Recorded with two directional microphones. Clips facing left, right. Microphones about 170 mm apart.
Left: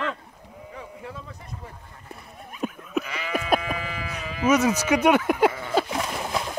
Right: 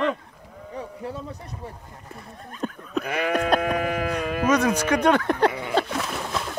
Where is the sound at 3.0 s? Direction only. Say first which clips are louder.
Right 6 dB; 55° right (ahead or behind).